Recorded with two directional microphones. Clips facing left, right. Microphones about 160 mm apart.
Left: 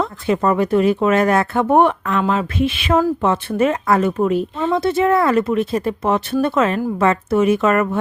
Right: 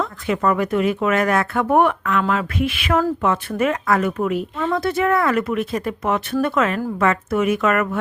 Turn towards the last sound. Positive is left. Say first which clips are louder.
# left 3 dB
turn(degrees=30)  # may be behind; listen again after turning